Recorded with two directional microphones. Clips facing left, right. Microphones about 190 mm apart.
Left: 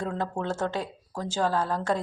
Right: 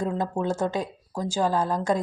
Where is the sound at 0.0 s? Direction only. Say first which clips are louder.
Right 4 dB; 10° right (ahead or behind).